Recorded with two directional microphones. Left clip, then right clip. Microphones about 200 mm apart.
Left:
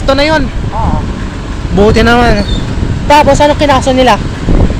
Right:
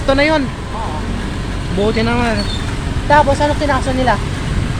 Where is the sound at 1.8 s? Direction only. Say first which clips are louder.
Left 10 dB; 30° left (ahead or behind).